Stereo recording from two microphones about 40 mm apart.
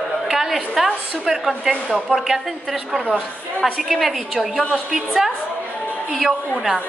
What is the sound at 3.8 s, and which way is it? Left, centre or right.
A woman's voice, centre.